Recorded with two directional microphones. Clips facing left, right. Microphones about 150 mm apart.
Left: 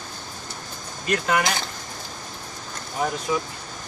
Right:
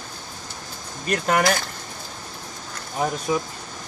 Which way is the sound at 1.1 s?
40° right (ahead or behind).